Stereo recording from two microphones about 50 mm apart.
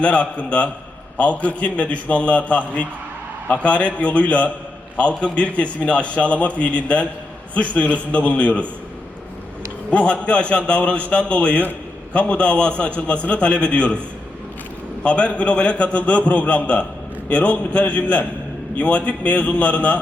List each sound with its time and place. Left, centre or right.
0.0 s a man's voice: left
9.9 s a man's voice: left
15.0 s a man's voice: left